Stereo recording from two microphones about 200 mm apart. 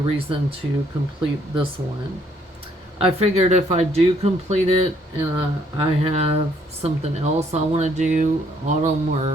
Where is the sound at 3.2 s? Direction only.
30° right (ahead or behind).